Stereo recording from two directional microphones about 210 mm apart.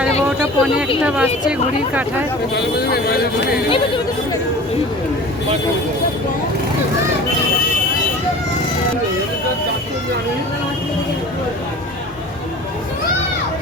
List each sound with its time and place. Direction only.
0.3 s a sound: 5° right (ahead or behind)
1.0 s speech: 5° right (ahead or behind)
2.6 s a man's voice: 50° left (ahead or behind)
3.7 s speech: 25° left (ahead or behind)